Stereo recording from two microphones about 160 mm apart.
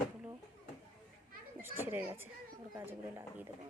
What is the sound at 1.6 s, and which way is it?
Speech, 15° right (ahead or behind).